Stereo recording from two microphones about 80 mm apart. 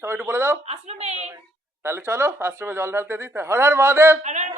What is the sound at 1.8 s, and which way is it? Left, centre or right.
A woman's voice, right.